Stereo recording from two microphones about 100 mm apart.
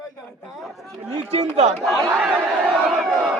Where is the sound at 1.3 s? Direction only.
90° right.